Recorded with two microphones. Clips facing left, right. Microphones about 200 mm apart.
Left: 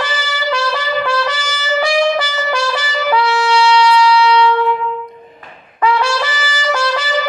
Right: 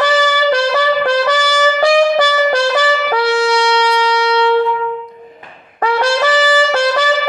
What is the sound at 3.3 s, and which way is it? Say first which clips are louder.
Shofar: right 2 dB; 35° right (ahead or behind).